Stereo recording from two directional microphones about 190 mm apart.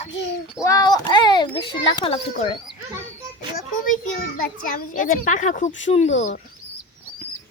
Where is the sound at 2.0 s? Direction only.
30° left (ahead or behind).